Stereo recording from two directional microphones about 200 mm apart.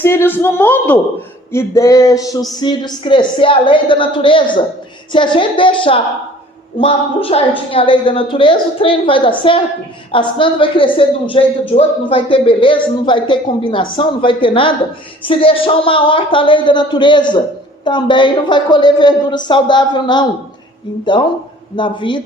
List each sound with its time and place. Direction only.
0.0 s speech: 10° left (ahead or behind)
21.8 s speech: 25° left (ahead or behind)